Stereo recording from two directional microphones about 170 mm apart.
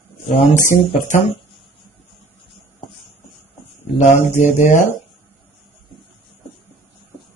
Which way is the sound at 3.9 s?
40° left (ahead or behind).